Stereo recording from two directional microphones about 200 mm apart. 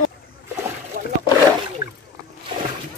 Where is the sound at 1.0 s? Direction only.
45° right (ahead or behind).